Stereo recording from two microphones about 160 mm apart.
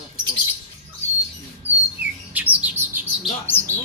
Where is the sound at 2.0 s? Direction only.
10° right (ahead or behind).